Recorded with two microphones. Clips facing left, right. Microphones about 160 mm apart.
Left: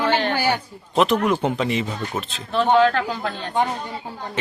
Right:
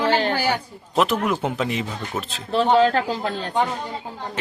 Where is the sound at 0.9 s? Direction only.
5° right (ahead or behind).